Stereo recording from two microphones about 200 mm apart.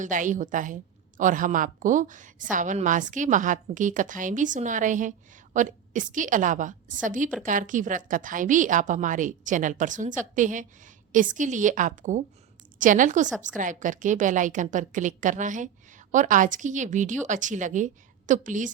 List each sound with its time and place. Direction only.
0.0 s a woman's voice: 40° right (ahead or behind)